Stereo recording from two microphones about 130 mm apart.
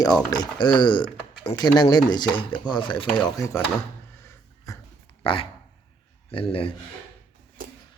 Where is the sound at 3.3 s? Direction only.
25° left (ahead or behind).